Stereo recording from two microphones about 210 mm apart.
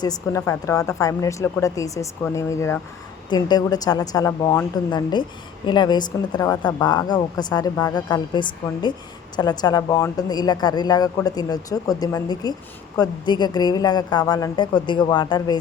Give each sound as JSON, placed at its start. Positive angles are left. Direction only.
{"t": 0.0, "sound": "speech", "side_deg": 15}